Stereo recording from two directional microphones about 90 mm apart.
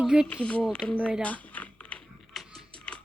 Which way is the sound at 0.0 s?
5° right (ahead or behind).